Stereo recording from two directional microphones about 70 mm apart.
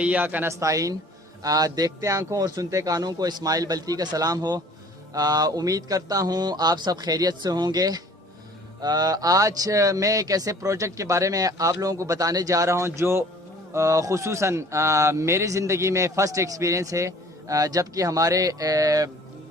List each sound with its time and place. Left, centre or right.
0.0 s speech: right
0.4 s a man's voice: right
13.7 s a man's voice: right